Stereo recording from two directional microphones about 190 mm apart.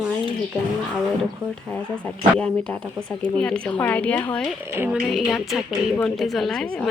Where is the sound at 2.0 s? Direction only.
5° left (ahead or behind).